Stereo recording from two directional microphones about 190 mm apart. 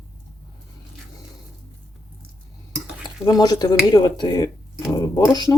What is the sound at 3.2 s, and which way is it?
Speech, 20° left (ahead or behind).